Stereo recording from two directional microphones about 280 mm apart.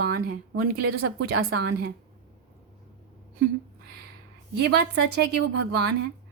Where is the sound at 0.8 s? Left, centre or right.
Right.